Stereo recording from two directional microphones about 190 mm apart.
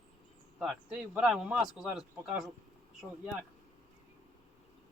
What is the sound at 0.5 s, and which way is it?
Speech, centre (ahead or behind).